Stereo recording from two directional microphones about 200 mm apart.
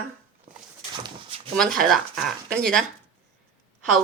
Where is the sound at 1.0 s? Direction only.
30° right (ahead or behind).